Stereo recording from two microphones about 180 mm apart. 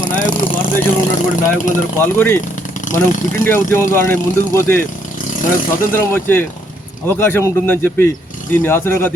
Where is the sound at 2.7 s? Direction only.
45° left (ahead or behind).